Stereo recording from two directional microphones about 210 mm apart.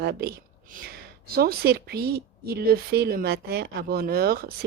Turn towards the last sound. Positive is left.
turn(degrees=-45)  # may be behind; listen again after turning